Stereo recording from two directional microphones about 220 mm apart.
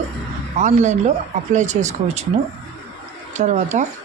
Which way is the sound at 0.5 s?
35° right (ahead or behind).